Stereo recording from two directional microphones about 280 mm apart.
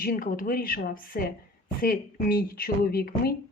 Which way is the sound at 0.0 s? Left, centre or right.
Left.